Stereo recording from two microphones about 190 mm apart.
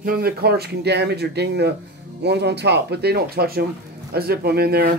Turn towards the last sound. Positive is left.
turn(degrees=-55)  # may be behind; listen again after turning